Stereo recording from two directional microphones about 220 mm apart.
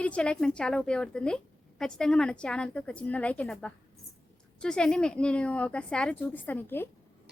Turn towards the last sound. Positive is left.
turn(degrees=10)  # may be behind; listen again after turning